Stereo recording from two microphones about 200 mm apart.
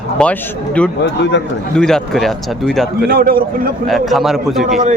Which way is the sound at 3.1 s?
50° right (ahead or behind).